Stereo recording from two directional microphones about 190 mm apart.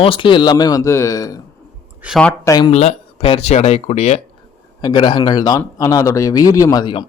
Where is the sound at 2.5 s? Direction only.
20° left (ahead or behind).